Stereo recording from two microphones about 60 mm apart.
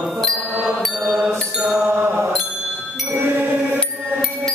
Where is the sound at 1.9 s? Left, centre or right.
Right.